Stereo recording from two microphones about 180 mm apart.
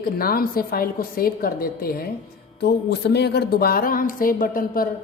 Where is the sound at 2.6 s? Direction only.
65° left (ahead or behind).